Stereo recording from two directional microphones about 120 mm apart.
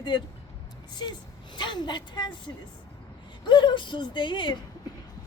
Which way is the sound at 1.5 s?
40° left (ahead or behind).